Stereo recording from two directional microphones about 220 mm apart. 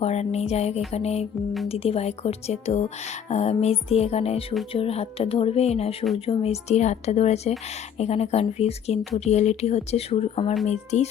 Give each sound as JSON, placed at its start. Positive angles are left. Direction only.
{"t": 0.0, "sound": "speech", "side_deg": 30}